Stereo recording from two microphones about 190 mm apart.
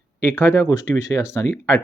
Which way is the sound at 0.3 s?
15° left (ahead or behind).